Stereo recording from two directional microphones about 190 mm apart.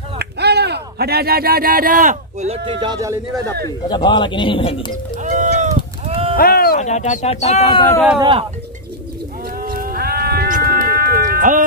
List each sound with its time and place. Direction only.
0.2 s speech: 60° right (ahead or behind); by 3.2 s 20° right (ahead or behind)
3.6 s speech: 25° left (ahead or behind)
5.2 s sheep: 40° right (ahead or behind)
6.0 s a sound: 30° right (ahead or behind)
6.3 s speech: 50° left (ahead or behind); by 7.8 s 35° left (ahead or behind)
8.2 s speech: 25° right (ahead or behind)
9.6 s cat: 50° right (ahead or behind)